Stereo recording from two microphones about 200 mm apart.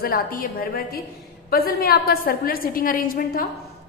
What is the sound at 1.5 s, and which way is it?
A woman's voice, 50° left (ahead or behind).